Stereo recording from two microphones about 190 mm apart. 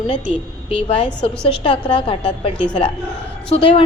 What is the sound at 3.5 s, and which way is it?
Speech, 30° left (ahead or behind).